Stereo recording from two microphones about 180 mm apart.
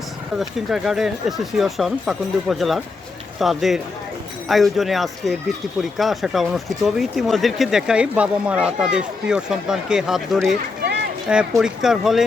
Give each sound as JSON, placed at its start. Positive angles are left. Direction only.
{"t": 0.3, "sound": "speech", "side_deg": 0}